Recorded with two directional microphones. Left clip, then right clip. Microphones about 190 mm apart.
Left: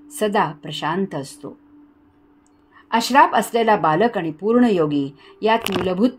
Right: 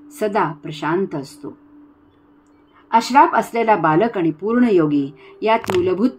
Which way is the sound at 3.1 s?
35° left (ahead or behind).